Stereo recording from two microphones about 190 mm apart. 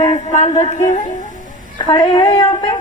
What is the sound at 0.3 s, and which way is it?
Speech, 35° left (ahead or behind).